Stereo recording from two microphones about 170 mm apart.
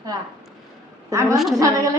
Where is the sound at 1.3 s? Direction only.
Centre (ahead or behind).